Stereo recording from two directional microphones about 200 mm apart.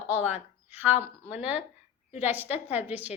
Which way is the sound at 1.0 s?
30° left (ahead or behind).